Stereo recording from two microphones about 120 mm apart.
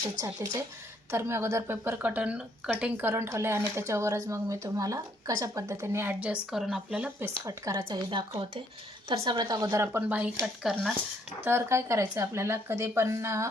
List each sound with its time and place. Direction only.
0.3 s speech: 30° right (ahead or behind); by 7.1 s 5° right (ahead or behind)
7.4 s speech: 30° right (ahead or behind)
7.9 s speech: 50° right (ahead or behind)
9.2 s speech: 35° right (ahead or behind); by 10.9 s 5° right (ahead or behind)
11.4 s speech: 20° right (ahead or behind)